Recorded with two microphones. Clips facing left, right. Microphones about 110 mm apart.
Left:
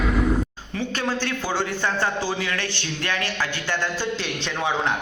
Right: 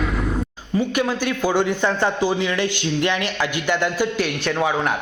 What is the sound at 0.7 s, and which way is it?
A man's voice, 15° right (ahead or behind).